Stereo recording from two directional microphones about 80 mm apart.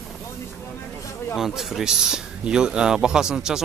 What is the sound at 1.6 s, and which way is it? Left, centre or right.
Speech, centre.